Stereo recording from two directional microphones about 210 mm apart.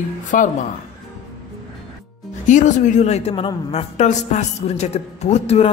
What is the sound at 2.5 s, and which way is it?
A woman's voice, 35° left (ahead or behind).